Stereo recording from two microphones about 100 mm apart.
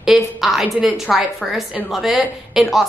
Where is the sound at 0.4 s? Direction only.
Centre (ahead or behind).